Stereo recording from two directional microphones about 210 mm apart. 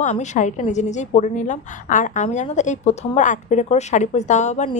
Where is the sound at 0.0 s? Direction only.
35° left (ahead or behind).